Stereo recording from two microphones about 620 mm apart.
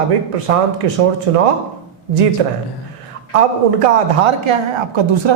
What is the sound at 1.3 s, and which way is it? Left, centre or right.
Speech, right.